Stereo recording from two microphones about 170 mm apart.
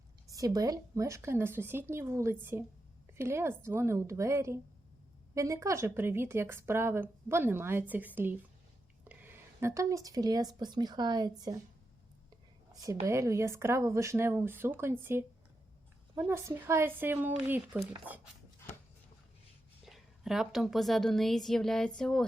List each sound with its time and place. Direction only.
0.3 s speech: 20° right (ahead or behind)
13.1 s speech: 15° right (ahead or behind)
19.8 s a woman's voice: centre (ahead or behind)